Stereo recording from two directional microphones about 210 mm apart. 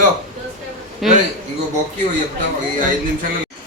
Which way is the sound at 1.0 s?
Centre (ahead or behind).